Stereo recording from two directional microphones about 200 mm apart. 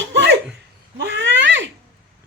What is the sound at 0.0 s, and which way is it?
Laughter, 65° right (ahead or behind).